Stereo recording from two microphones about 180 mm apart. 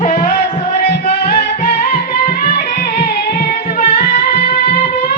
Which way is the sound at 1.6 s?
50° left (ahead or behind).